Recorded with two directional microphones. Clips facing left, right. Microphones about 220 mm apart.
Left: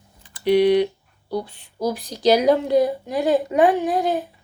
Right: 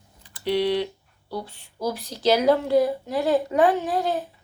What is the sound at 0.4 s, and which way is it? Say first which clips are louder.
Speech: left 7 dB; 15° left (ahead or behind).